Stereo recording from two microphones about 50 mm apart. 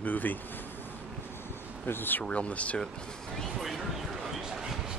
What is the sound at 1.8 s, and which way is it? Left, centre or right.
Speech, left.